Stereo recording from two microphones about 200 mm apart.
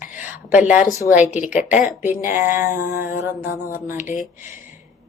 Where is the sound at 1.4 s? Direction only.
40° left (ahead or behind).